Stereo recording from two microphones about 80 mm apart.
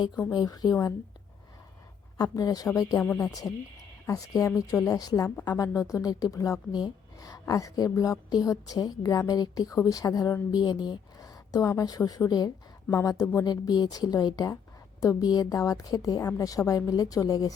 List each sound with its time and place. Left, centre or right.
0.3 s a woman's voice: left
2.1 s a woman's voice: left
10.5 s a woman's voice: left
13.4 s a woman's voice: left